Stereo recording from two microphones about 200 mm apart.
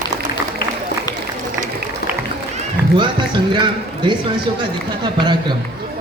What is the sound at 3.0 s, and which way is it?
A woman's voice, 25° right (ahead or behind).